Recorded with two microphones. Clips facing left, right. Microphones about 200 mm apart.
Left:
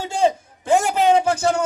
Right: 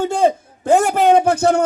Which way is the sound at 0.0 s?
55° right (ahead or behind).